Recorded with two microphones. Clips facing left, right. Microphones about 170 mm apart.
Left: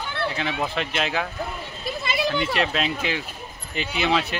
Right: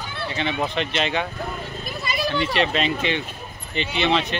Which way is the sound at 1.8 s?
25° left (ahead or behind).